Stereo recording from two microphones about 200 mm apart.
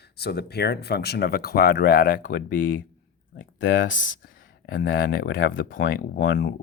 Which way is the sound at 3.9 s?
40° left (ahead or behind).